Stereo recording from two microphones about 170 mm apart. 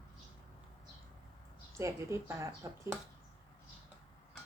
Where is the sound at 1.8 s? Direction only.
15° right (ahead or behind).